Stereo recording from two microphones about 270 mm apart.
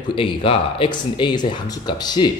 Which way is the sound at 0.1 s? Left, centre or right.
Centre.